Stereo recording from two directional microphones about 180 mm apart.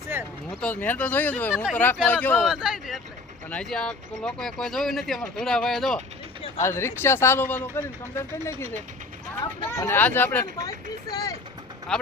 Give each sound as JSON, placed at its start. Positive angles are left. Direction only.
{"t": 0.6, "sound": "speech", "side_deg": 10}
{"t": 2.4, "sound": "speech", "side_deg": -5}
{"t": 6.6, "sound": "speech", "side_deg": 15}
{"t": 11.9, "sound": "speech", "side_deg": 0}